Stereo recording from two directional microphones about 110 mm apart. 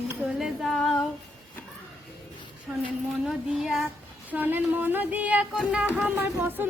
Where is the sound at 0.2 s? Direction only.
Centre (ahead or behind).